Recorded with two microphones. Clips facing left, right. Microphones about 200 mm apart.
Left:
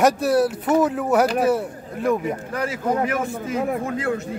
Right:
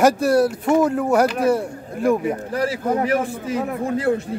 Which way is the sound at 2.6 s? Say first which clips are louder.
Right 1 dB; 35° right (ahead or behind).